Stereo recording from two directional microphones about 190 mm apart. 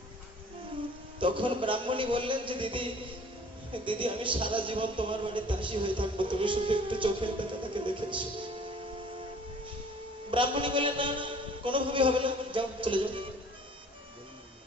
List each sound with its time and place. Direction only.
1.2 s speech: 25° right (ahead or behind)
10.3 s a man's voice: 25° right (ahead or behind)